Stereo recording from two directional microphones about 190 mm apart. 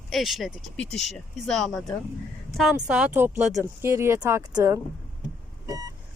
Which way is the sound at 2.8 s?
5° right (ahead or behind).